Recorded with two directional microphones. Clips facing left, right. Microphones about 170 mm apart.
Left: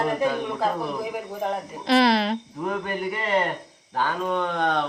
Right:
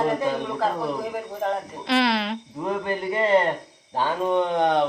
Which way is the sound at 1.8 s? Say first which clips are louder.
Left 3 dB; 40° left (ahead or behind).